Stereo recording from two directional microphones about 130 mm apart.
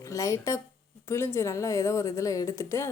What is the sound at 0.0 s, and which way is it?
A woman's voice, 25° left (ahead or behind).